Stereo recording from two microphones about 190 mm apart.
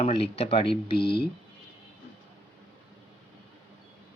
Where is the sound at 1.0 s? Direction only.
55° left (ahead or behind).